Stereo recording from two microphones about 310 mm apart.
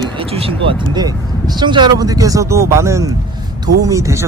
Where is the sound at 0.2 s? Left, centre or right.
Centre.